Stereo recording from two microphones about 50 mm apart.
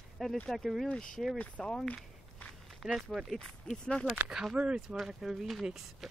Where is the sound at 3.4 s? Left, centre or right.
Centre.